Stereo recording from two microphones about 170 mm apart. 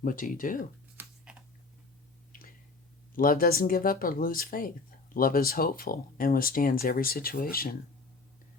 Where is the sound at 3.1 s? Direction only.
55° left (ahead or behind).